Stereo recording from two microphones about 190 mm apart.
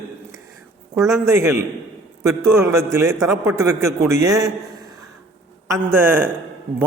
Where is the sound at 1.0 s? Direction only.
15° right (ahead or behind).